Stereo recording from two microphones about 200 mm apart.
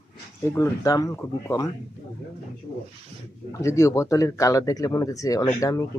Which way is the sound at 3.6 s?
15° left (ahead or behind).